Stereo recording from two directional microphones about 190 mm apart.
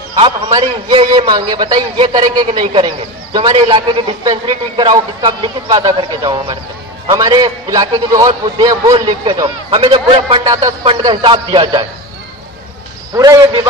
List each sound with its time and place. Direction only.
0.1 s a man's voice: 25° right (ahead or behind)
13.1 s a man's voice: 15° right (ahead or behind)